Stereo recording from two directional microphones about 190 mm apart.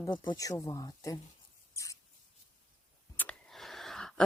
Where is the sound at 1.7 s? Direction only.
15° left (ahead or behind).